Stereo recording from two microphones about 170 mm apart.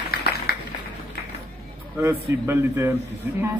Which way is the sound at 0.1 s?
65° left (ahead or behind).